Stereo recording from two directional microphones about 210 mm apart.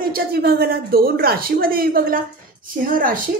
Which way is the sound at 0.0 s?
45° right (ahead or behind).